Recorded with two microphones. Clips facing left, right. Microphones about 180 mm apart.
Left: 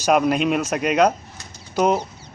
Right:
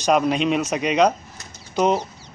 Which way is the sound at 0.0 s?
5° left (ahead or behind).